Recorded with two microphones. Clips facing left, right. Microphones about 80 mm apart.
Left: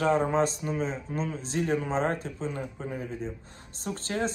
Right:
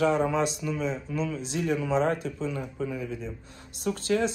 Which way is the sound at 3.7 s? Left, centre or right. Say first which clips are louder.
Right 6 dB; left.